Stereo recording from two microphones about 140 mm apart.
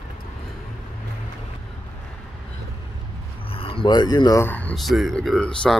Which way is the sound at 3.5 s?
40° left (ahead or behind).